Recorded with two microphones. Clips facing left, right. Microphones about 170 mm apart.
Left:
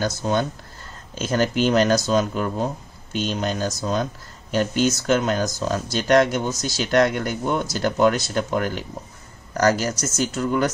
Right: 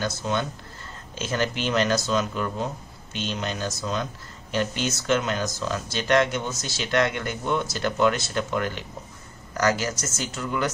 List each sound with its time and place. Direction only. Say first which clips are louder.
0.0 s speech: left 4 dB; 40° left (ahead or behind)